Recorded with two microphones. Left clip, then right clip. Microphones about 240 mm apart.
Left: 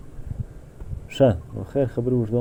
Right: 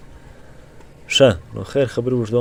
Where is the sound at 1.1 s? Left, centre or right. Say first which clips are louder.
Right 6 dB; right.